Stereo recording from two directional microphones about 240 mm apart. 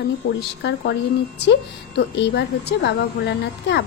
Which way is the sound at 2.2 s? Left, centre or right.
Left.